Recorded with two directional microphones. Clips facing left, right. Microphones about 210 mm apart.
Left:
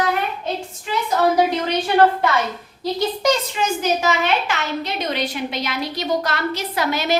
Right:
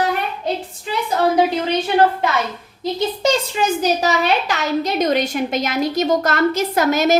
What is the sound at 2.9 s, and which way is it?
A child's voice, 30° right (ahead or behind).